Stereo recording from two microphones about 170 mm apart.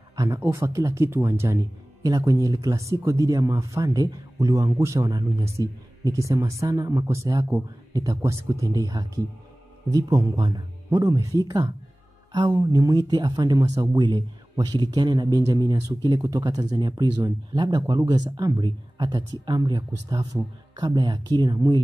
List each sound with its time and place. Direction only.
0.1 s speech: 20° right (ahead or behind)